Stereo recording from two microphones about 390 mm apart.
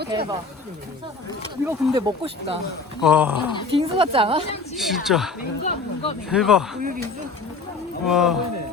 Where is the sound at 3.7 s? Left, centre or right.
Centre.